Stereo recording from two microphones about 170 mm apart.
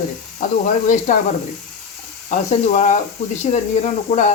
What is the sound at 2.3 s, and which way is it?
Speech, 45° left (ahead or behind).